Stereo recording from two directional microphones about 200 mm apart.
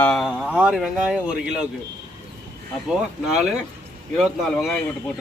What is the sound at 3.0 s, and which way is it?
Speech, centre (ahead or behind).